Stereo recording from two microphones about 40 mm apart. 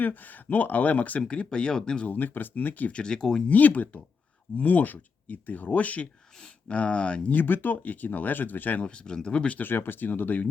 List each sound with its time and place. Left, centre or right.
0.0 s speech: left
1.2 s speech: left
2.0 s speech: left
2.9 s speech: centre
3.4 s speech: left
7.3 s speech: left
8.8 s speech: left
9.6 s speech: left